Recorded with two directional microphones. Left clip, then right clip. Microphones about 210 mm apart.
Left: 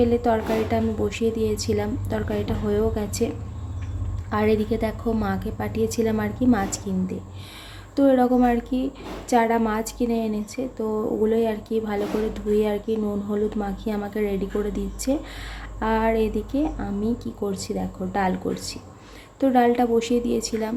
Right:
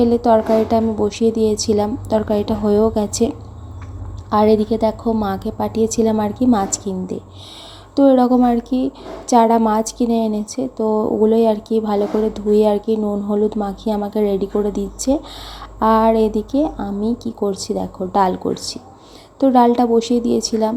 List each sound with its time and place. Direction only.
0.0 s a woman's voice: 15° right (ahead or behind)